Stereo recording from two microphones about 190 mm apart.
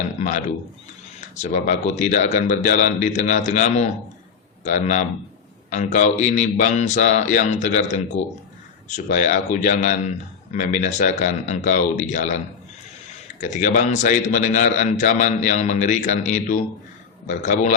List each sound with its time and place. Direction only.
0.2 s a man's voice: 40° left (ahead or behind)
13.4 s a man's voice: 40° left (ahead or behind)